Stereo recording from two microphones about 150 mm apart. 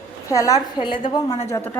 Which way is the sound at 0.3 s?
20° left (ahead or behind).